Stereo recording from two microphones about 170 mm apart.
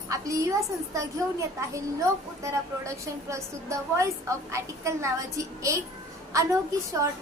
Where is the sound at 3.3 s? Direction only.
15° right (ahead or behind).